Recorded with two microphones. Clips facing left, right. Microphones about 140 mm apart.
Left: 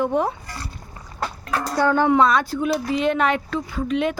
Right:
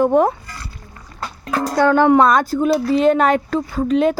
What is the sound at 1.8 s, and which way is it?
Speech, 70° right (ahead or behind).